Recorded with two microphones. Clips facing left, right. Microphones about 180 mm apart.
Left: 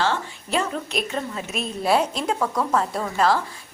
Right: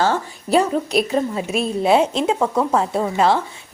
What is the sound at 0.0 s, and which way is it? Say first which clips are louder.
Speech: right 4 dB; 40° right (ahead or behind).